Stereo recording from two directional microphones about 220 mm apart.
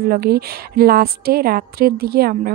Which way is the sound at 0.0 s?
45° right (ahead or behind).